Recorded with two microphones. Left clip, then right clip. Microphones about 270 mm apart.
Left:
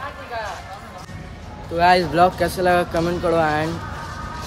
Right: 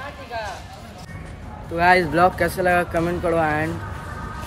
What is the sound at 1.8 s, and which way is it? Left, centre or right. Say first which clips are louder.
Speech: left 1 dB; centre.